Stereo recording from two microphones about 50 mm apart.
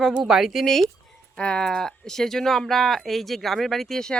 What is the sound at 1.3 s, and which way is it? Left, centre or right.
Speech, left.